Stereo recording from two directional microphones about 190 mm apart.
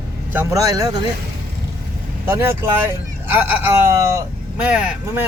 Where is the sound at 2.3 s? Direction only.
10° right (ahead or behind).